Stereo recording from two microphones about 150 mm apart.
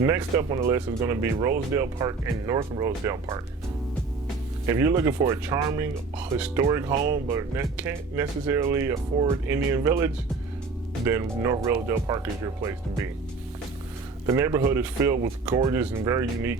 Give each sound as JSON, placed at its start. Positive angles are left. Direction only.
{"t": 0.0, "sound": "speech", "side_deg": -15}
{"t": 4.6, "sound": "speech", "side_deg": -15}
{"t": 14.3, "sound": "speech", "side_deg": -20}